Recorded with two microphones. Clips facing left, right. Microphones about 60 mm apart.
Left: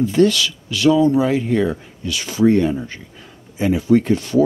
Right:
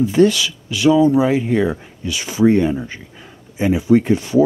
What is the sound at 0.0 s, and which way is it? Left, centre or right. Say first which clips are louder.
Speech: right 1 dB; centre.